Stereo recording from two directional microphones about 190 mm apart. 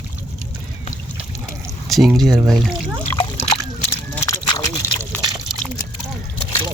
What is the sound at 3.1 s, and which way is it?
Splash, 15° left (ahead or behind).